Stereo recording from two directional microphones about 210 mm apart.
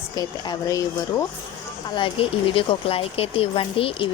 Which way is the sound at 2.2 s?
25° left (ahead or behind).